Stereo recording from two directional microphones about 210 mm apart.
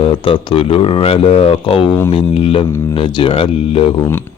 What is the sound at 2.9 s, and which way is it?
Speech, 25° left (ahead or behind).